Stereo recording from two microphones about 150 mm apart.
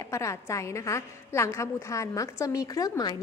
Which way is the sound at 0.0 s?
20° left (ahead or behind).